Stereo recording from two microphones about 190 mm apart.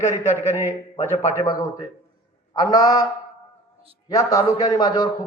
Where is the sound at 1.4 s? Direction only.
20° left (ahead or behind).